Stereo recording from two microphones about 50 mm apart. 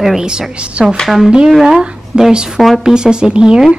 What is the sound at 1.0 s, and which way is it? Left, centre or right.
A woman's voice, centre.